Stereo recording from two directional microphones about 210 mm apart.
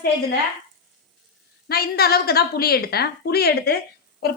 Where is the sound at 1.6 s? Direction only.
50° left (ahead or behind).